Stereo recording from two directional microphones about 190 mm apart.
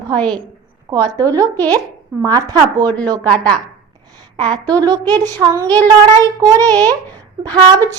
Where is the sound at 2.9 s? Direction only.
5° left (ahead or behind).